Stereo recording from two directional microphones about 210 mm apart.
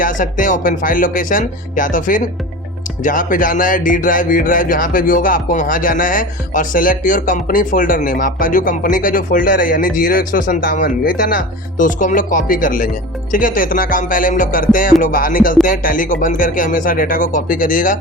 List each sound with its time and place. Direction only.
0.0 s speech: 40° left (ahead or behind)